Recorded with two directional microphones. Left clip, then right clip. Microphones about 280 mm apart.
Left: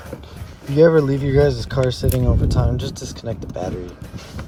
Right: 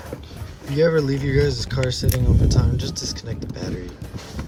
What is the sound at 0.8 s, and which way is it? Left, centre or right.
Speech, centre.